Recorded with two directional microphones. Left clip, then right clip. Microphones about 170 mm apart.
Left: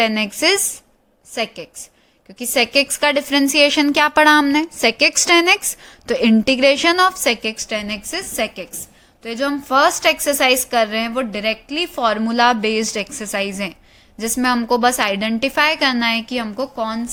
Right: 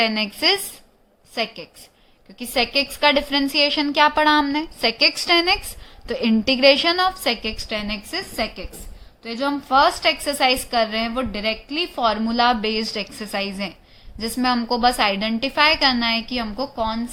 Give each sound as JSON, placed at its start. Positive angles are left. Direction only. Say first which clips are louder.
{"t": 0.0, "sound": "a woman's voice", "louder": "left 3 dB", "side_deg": 40}